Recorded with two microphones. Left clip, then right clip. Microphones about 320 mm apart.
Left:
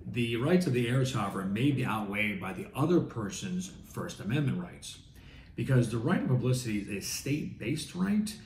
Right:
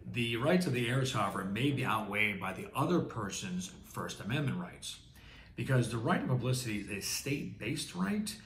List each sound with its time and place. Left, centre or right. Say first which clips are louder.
0.1 s speech: left 2 dB; centre